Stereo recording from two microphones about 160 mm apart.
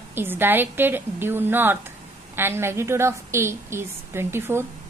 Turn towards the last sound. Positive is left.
turn(degrees=-15)  # may be behind; listen again after turning